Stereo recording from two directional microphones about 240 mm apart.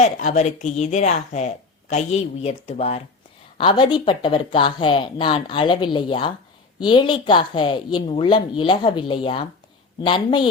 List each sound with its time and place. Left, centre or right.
0.0 s a woman's voice: left